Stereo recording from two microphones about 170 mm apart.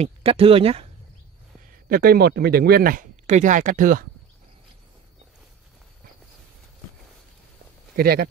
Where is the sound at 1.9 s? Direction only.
65° right (ahead or behind).